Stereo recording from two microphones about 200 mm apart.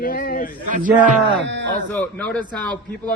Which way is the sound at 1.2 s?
65° right (ahead or behind).